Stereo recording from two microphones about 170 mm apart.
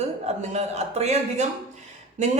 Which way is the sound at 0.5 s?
40° right (ahead or behind).